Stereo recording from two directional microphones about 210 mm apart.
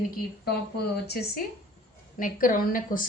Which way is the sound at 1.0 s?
50° left (ahead or behind).